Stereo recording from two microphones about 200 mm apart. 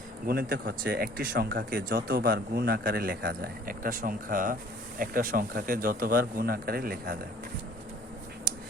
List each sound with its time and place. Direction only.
0.3 s speech: 50° right (ahead or behind)